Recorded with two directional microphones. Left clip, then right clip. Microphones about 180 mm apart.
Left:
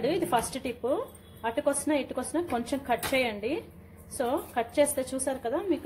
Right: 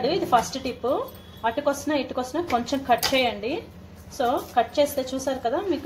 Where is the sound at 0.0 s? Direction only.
15° left (ahead or behind).